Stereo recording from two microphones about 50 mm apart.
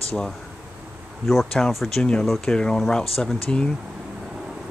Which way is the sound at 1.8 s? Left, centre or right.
Centre.